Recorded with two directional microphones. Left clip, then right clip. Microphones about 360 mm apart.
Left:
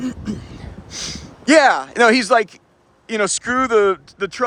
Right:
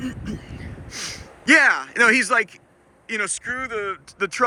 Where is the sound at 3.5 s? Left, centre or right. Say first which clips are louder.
Left 11 dB; left.